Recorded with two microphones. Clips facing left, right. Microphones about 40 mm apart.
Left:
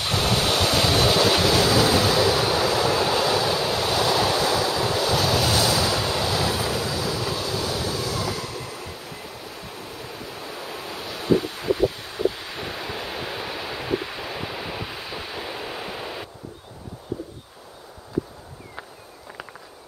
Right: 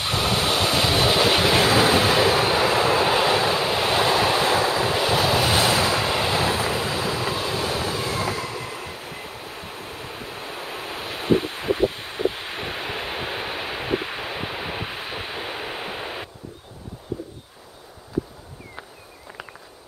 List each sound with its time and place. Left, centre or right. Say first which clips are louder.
0.0 s vehicle: even; right